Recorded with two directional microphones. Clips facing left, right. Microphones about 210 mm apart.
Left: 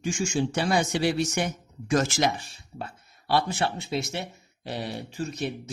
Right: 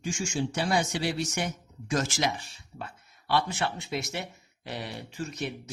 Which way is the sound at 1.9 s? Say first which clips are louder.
Left 5 dB; 55° left (ahead or behind).